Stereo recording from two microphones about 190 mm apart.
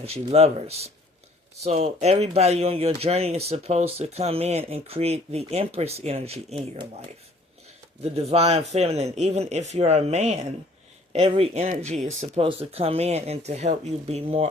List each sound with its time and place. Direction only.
0.0 s speech: 30° right (ahead or behind)
8.0 s speech: 35° right (ahead or behind)